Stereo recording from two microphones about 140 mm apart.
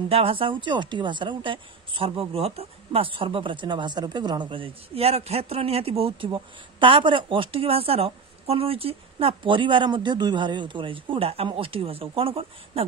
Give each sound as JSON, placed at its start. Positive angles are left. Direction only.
{"t": 0.1, "sound": "speech", "side_deg": -40}